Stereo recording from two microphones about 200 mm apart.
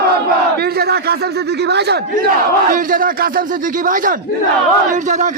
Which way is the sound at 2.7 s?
45° right (ahead or behind).